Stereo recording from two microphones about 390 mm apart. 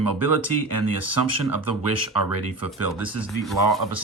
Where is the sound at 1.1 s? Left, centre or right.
Right.